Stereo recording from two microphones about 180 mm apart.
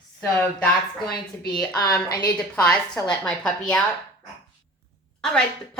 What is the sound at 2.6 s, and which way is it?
A woman's voice, 5° left (ahead or behind).